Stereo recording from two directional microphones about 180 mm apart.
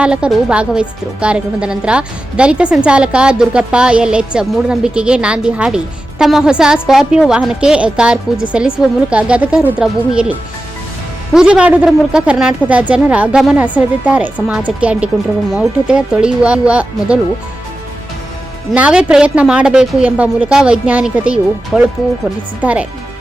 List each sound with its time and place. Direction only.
0.0 s a woman's voice: 5° right (ahead or behind)
11.3 s a woman's voice: 5° right (ahead or behind)
18.7 s a woman's voice: 5° right (ahead or behind)